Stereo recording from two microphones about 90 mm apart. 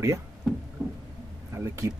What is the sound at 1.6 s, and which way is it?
Speech, 35° right (ahead or behind).